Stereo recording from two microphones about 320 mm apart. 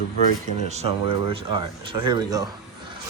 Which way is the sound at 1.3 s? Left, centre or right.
Centre.